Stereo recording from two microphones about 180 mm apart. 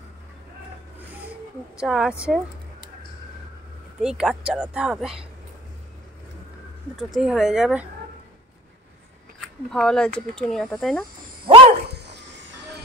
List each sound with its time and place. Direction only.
1.8 s speech: 5° right (ahead or behind)
4.0 s speech: 5° right (ahead or behind)
7.0 s speech: centre (ahead or behind)
9.7 s speech: 5° left (ahead or behind)
11.4 s dog: 30° right (ahead or behind)